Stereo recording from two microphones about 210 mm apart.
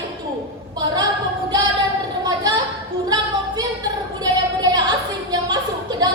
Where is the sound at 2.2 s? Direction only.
20° right (ahead or behind).